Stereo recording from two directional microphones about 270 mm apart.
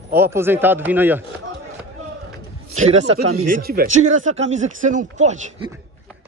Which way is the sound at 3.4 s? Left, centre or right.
Right.